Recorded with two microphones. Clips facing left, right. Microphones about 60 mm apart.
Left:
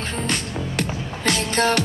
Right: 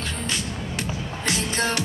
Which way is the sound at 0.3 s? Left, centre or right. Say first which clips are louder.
Left 3 dB; left.